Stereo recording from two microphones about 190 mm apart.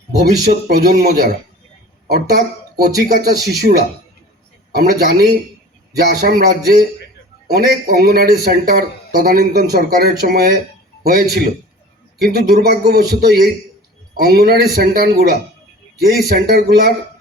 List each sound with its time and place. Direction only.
0.4 s a man's voice: 55° right (ahead or behind)